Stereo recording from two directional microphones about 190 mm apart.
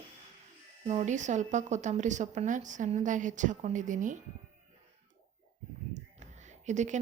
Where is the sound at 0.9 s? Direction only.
35° right (ahead or behind).